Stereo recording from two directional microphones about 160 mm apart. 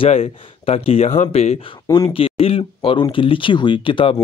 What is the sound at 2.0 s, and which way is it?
Speech, 35° left (ahead or behind).